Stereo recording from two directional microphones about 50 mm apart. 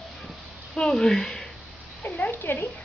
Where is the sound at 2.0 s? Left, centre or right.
Left.